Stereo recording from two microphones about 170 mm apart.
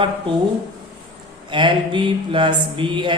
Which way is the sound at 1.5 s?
30° right (ahead or behind).